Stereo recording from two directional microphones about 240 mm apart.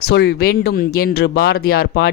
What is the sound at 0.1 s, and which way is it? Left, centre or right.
Speech, left.